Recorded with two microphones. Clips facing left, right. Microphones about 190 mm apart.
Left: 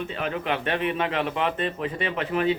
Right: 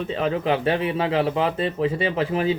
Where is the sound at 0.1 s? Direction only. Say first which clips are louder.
Right 9 dB; 30° right (ahead or behind).